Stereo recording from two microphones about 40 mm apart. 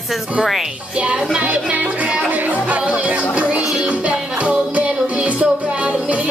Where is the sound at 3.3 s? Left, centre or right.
Right.